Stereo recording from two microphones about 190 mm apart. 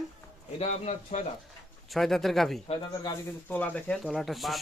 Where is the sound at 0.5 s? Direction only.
35° left (ahead or behind).